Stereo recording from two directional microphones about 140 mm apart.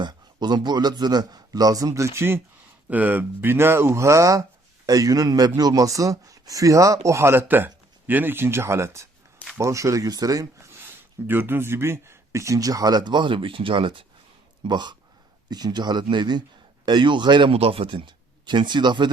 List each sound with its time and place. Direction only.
0.0 s speech: 30° right (ahead or behind)